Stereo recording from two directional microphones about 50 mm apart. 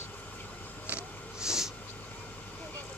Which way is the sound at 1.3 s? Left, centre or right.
Centre.